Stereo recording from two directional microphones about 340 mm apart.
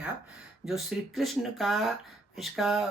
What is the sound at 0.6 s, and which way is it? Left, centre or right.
Speech, centre.